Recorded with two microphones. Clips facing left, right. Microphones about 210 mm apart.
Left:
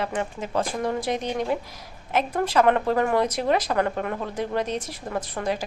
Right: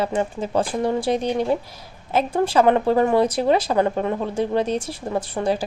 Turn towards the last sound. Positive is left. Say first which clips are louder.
# right 5 dB
turn(degrees=-30)  # may be behind; listen again after turning